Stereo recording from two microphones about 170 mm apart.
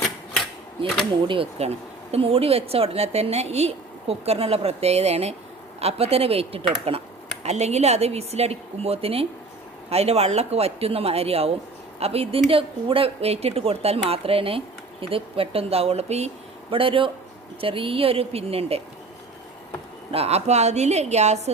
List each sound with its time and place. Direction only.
0.8 s a woman's voice: 30° right (ahead or behind)
20.1 s a woman's voice: 35° right (ahead or behind)